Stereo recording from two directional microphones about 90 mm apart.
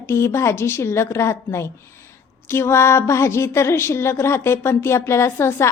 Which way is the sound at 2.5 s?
30° left (ahead or behind).